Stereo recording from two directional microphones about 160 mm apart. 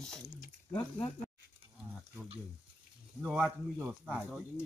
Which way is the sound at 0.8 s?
25° left (ahead or behind).